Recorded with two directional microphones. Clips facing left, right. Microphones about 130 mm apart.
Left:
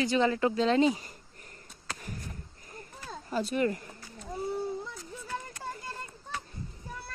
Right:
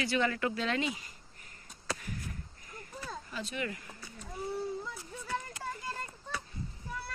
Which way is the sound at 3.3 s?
40° left (ahead or behind).